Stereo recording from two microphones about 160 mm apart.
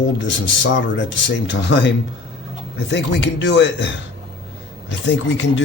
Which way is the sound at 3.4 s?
90° left.